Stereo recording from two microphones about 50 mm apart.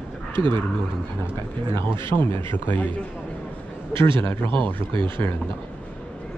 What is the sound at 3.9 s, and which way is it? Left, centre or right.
Speech, left.